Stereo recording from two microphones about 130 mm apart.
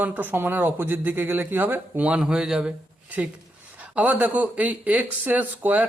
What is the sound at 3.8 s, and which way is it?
Speech, 10° right (ahead or behind).